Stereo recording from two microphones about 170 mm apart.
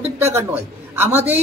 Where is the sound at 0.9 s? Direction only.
10° right (ahead or behind).